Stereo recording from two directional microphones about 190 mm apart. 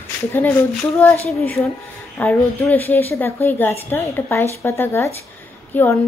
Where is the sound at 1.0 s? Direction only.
10° left (ahead or behind).